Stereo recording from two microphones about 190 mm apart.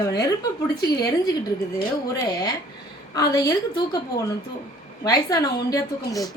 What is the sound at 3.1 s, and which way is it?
A woman's voice, 20° left (ahead or behind).